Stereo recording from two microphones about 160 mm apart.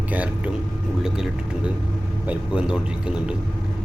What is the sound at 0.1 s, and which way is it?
Speech, 10° right (ahead or behind).